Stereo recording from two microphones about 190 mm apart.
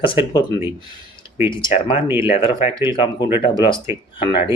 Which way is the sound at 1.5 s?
25° left (ahead or behind).